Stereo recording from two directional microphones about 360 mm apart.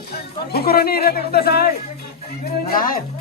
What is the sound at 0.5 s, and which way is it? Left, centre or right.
Speech, left.